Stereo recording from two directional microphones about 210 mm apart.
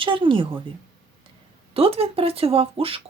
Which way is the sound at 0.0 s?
25° right (ahead or behind).